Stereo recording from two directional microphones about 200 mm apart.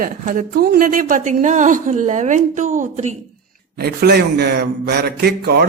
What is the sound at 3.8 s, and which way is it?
A man's voice, 55° right (ahead or behind).